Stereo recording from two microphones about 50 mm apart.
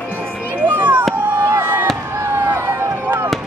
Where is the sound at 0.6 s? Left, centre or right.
Right.